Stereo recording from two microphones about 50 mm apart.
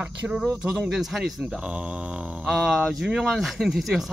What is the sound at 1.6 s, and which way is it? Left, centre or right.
Speech, right.